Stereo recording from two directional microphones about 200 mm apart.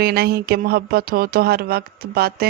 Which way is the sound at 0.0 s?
50° right (ahead or behind).